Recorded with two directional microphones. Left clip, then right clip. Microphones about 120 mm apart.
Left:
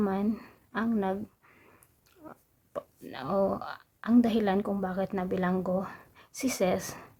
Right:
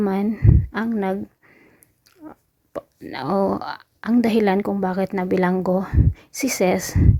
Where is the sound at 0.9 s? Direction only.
35° right (ahead or behind).